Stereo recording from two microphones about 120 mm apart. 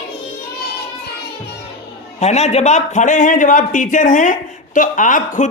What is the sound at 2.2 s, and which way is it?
A man's voice, 65° left (ahead or behind).